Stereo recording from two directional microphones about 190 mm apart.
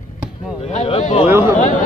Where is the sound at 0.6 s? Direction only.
35° left (ahead or behind).